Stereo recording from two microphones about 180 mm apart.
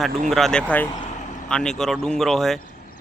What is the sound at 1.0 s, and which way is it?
Vehicle, 45° left (ahead or behind).